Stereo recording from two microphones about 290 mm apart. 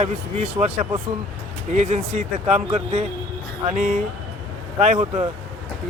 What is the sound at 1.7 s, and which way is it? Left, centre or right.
Speech, right.